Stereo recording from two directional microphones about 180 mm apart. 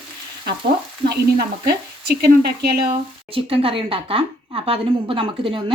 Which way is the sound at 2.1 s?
60° right (ahead or behind).